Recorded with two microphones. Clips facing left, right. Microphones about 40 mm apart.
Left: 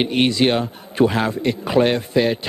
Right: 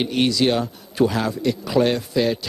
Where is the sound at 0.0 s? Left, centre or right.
Left.